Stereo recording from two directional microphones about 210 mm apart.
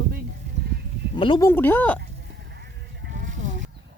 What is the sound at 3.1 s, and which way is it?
Sheep, 40° right (ahead or behind).